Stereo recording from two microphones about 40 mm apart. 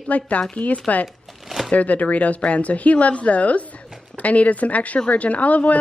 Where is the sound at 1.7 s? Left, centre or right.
Left.